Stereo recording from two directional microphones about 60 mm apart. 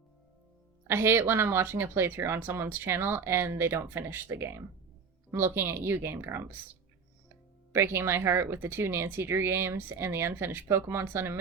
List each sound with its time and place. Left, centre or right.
0.9 s speech: right
7.7 s speech: right